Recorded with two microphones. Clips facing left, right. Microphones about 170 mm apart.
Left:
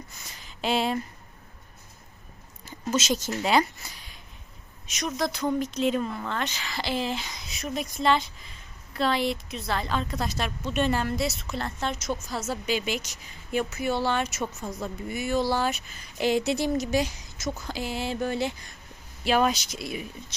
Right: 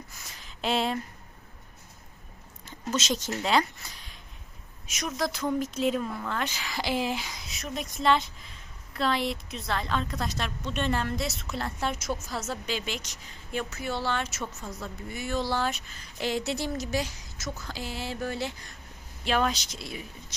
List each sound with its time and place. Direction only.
0.3 s a sound: centre (ahead or behind)
2.6 s speech: 5° left (ahead or behind)
4.9 s a woman's voice: 5° right (ahead or behind); by 20.1 s 15° left (ahead or behind)